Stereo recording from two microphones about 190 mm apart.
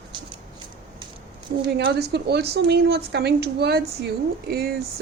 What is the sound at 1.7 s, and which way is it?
Speech, 55° right (ahead or behind).